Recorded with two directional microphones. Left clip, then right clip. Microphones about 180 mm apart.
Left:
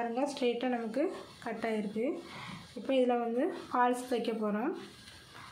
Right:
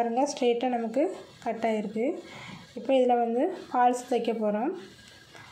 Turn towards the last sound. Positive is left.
turn(degrees=-10)  # may be behind; listen again after turning